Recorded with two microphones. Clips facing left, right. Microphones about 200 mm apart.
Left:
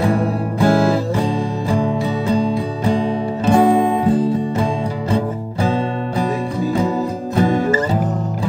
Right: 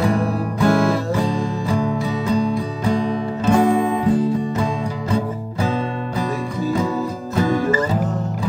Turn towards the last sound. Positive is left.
turn(degrees=30)  # may be behind; listen again after turning